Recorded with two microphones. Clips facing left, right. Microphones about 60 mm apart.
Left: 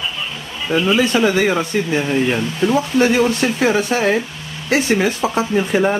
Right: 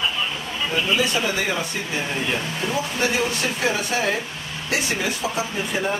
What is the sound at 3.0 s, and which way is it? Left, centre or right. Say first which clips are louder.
Speech: left 8 dB; left.